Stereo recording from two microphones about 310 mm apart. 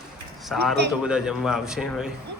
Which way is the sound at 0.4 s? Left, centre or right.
Centre.